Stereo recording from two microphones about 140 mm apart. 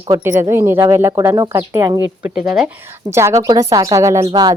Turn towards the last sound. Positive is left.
turn(degrees=-25)  # may be behind; listen again after turning